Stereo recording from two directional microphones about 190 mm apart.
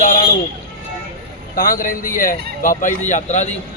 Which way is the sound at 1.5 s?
45° left (ahead or behind).